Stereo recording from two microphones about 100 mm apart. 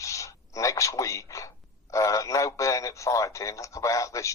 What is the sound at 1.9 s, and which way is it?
Radio, 30° left (ahead or behind).